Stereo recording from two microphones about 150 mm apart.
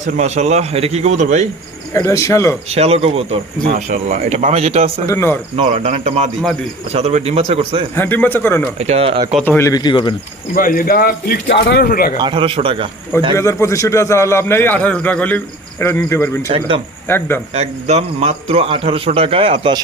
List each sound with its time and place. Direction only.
0.0 s speech: 50° right (ahead or behind)
1.9 s a man's voice: 20° left (ahead or behind)
2.6 s speech: 45° right (ahead or behind)
5.0 s a man's voice: 15° left (ahead or behind)
5.5 s speech: 40° right (ahead or behind)
7.9 s a man's voice: 15° left (ahead or behind)
8.8 s speech: 45° right (ahead or behind)
9.4 s a man's voice: 15° left (ahead or behind); by 10.2 s 30° left (ahead or behind)
10.5 s a man's voice: 70° left (ahead or behind)
12.2 s a man's voice: 35° right (ahead or behind)
13.3 s a man's voice: 20° left (ahead or behind)
16.5 s a man's voice: 35° right (ahead or behind)
17.1 s a man's voice: 15° left (ahead or behind)
17.5 s a man's voice: 45° right (ahead or behind)